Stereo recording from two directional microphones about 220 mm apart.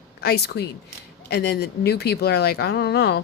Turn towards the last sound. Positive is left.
turn(degrees=50)  # may be behind; listen again after turning